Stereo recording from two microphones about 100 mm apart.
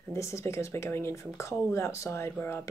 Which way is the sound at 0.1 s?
30° left (ahead or behind).